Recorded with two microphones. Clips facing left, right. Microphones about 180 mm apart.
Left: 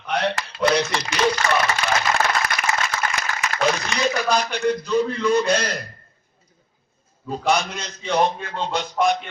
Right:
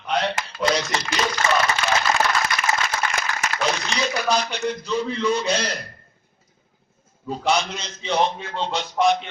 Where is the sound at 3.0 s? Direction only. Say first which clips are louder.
Even; 40° left (ahead or behind).